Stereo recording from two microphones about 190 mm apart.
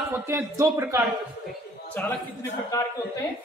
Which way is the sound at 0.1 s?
15° right (ahead or behind).